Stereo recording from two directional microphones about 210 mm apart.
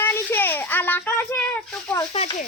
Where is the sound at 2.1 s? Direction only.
30° left (ahead or behind).